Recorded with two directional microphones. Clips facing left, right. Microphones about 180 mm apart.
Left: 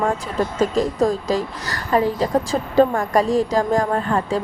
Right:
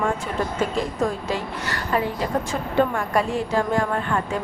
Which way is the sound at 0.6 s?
40° left (ahead or behind).